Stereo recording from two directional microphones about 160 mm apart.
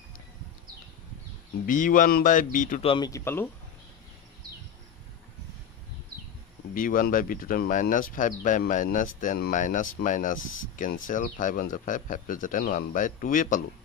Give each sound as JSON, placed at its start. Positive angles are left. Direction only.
{"t": 1.7, "sound": "speech", "side_deg": 55}
{"t": 2.8, "sound": "speech", "side_deg": 35}
{"t": 3.1, "sound": "speech", "side_deg": 15}
{"t": 6.7, "sound": "speech", "side_deg": 60}